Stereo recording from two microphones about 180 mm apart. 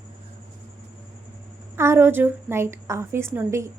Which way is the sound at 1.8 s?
15° right (ahead or behind).